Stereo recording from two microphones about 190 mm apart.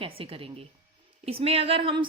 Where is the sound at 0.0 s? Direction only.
30° right (ahead or behind).